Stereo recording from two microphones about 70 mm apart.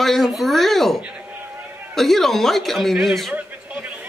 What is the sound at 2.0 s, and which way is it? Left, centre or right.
A man's voice, centre.